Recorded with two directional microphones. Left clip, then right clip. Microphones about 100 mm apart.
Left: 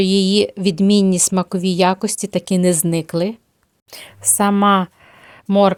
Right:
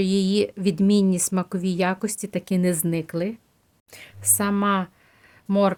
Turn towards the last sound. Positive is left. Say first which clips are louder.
# left 7 dB
turn(degrees=35)  # may be behind; listen again after turning